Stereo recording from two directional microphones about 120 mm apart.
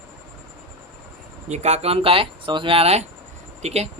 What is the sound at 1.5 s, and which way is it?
Speech, 65° right (ahead or behind).